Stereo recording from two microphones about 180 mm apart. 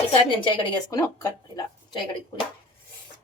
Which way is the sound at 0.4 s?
25° left (ahead or behind).